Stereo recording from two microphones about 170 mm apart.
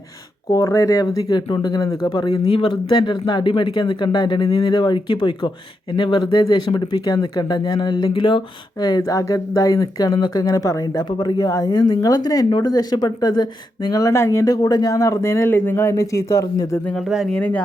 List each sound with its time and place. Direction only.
0.5 s speech: 20° left (ahead or behind)
16.8 s speech: centre (ahead or behind)